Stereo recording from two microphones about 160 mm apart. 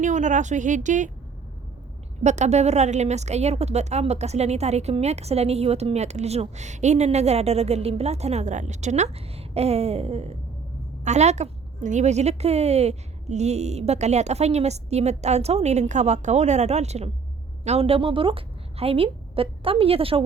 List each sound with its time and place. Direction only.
0.0 s a woman's voice: 50° right (ahead or behind)
2.2 s a woman's voice: 45° right (ahead or behind)